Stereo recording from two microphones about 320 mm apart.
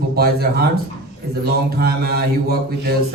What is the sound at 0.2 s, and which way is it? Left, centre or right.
Speech, right.